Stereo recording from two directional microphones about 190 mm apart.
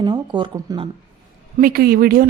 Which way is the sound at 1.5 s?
50° right (ahead or behind).